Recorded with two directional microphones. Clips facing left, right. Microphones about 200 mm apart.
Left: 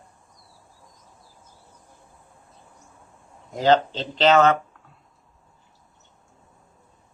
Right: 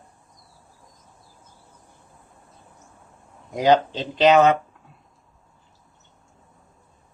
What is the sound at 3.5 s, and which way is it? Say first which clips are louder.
Speech: right 1 dB; 15° right (ahead or behind).